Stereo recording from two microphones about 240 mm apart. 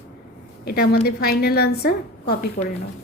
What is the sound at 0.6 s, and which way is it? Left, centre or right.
A woman's voice, left.